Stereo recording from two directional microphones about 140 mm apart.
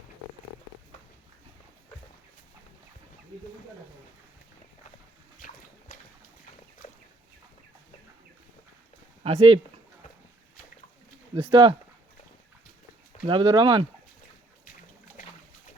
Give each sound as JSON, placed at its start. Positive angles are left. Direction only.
{"t": 5.4, "sound": "a sound", "side_deg": 90}
{"t": 6.8, "sound": "chicken", "side_deg": 50}
{"t": 9.2, "sound": "speech", "side_deg": -45}
{"t": 11.5, "sound": "speech", "side_deg": -40}
{"t": 13.2, "sound": "speech", "side_deg": -35}